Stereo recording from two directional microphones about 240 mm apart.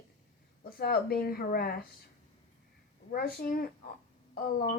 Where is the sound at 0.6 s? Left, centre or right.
Left.